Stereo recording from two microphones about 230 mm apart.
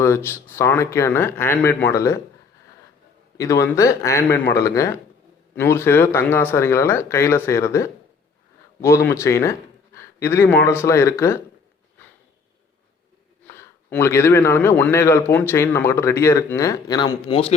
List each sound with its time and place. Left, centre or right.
0.0 s a man's voice: centre
3.3 s a man's voice: centre
13.5 s a man's voice: centre